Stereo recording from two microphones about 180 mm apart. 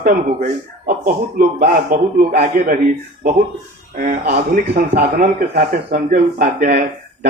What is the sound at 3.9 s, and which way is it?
Speech, 45° right (ahead or behind).